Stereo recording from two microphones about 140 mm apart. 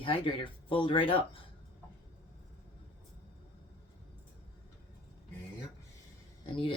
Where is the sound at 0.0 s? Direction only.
40° left (ahead or behind).